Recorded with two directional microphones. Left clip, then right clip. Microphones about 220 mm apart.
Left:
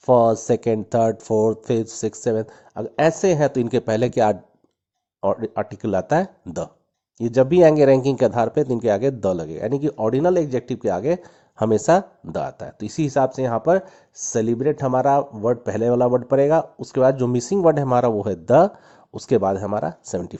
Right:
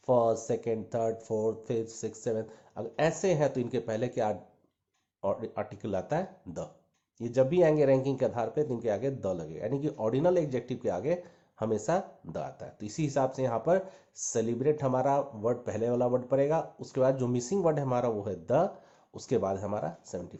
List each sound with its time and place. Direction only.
0.0 s speech: 45° left (ahead or behind)